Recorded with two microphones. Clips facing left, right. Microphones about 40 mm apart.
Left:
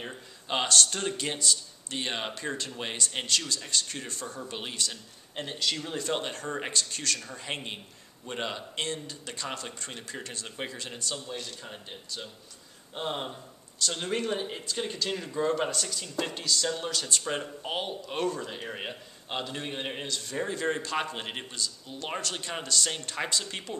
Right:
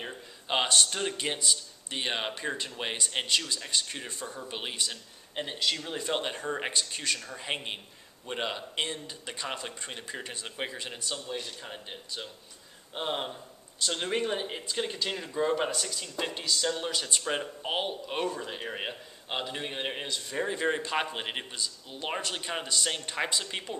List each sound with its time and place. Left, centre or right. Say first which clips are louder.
0.5 s speech: even; centre
7.2 s speech: even; centre
7.4 s speech: right 2 dB; centre